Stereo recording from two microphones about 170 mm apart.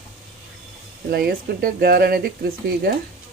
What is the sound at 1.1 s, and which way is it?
Speech, 65° right (ahead or behind).